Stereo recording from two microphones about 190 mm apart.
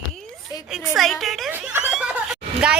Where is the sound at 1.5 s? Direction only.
10° right (ahead or behind).